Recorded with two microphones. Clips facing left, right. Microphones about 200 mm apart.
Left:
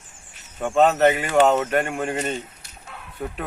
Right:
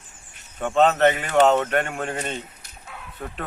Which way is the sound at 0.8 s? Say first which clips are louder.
Left 1 dB; 5° left (ahead or behind).